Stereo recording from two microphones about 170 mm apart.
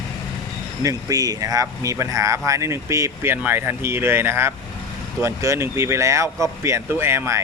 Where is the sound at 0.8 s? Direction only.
20° right (ahead or behind).